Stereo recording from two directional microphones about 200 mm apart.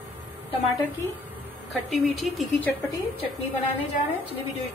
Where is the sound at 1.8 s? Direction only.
Centre (ahead or behind).